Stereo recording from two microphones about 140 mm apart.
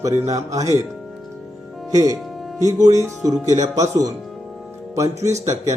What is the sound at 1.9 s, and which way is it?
Speech, 25° right (ahead or behind).